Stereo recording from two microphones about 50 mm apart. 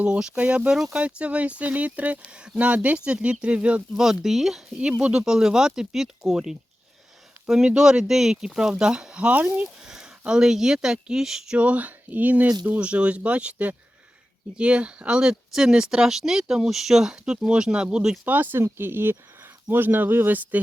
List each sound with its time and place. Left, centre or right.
0.0 s speech: centre
2.2 s speech: centre
3.9 s speech: centre
4.8 s speech: centre
9.8 s speech: centre
11.5 s speech: right
12.8 s speech: right
18.3 s speech: right
18.6 s speech: right